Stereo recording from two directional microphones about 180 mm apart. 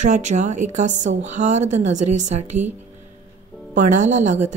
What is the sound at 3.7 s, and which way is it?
Speech, 40° right (ahead or behind).